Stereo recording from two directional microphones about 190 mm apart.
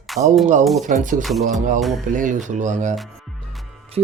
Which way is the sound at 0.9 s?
40° right (ahead or behind).